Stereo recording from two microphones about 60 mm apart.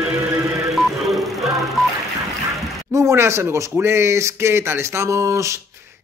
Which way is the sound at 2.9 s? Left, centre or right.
Right.